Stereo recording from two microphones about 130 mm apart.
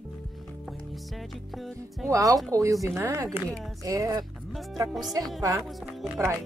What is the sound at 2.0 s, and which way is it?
Speech, 25° right (ahead or behind).